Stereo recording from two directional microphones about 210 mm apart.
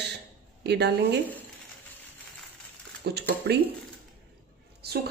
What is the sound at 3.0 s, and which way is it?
Speech, 50° right (ahead or behind).